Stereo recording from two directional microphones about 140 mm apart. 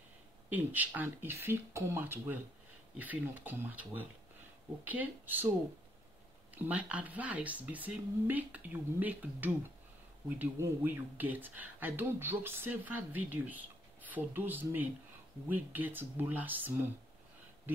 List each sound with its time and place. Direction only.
0.5 s speech: 10° right (ahead or behind)
6.5 s speech: 10° right (ahead or behind)